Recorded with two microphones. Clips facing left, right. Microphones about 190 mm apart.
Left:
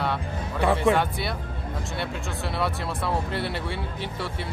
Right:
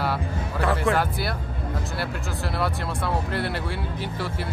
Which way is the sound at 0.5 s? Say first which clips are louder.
Left 2 dB; 10° left (ahead or behind).